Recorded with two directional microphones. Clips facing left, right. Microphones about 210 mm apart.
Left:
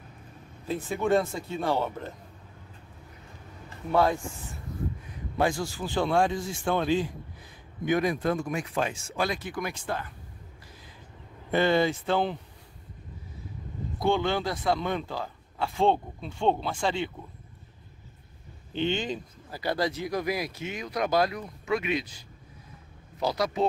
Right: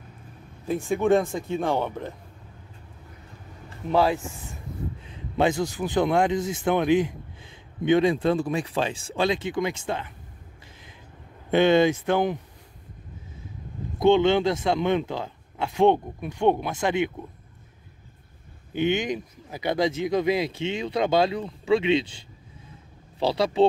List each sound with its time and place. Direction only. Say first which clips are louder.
0.7 s speech: right 4 dB; 15° right (ahead or behind)
5.1 s a man's voice: right 4 dB; 20° right (ahead or behind)
11.5 s a man's voice: right 5 dB; 20° right (ahead or behind)
13.9 s a man's voice: right 8 dB; 20° right (ahead or behind)
18.7 s a man's voice: right 4 dB; 15° right (ahead or behind); by 23.7 s 30° right (ahead or behind)